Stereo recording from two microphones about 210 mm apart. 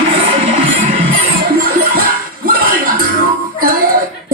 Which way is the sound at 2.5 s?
40° right (ahead or behind).